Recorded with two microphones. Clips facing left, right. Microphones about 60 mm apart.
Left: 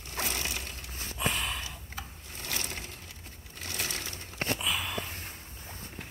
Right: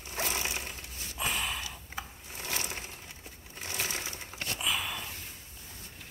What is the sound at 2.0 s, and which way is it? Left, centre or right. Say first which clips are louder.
Wood: right 3 dB; centre.